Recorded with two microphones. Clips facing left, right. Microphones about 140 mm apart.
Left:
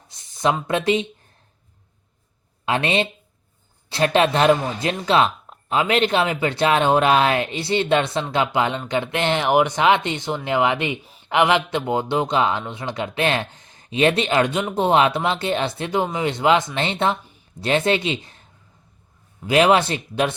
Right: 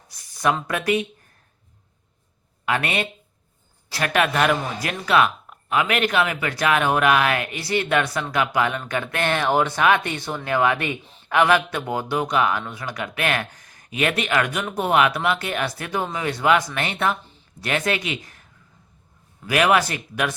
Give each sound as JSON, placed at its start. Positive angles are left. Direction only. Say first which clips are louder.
{"t": 0.1, "sound": "a sound", "louder": "left 1 dB", "side_deg": 20}
{"t": 0.7, "sound": "a man's voice", "louder": "left 2 dB", "side_deg": 25}
{"t": 2.6, "sound": "a man's voice", "louder": "left 3 dB", "side_deg": 25}
{"t": 19.5, "sound": "a man's voice", "louder": "left 3 dB", "side_deg": 25}